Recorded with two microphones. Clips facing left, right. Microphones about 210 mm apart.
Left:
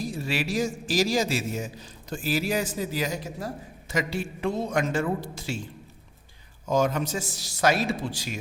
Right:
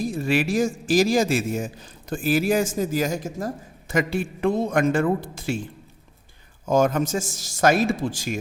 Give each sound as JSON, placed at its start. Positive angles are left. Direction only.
{"t": 0.0, "sound": "a man's voice", "side_deg": -50}
{"t": 6.7, "sound": "a man's voice", "side_deg": -50}